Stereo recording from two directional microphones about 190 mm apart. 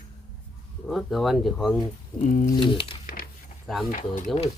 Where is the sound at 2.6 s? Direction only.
25° left (ahead or behind).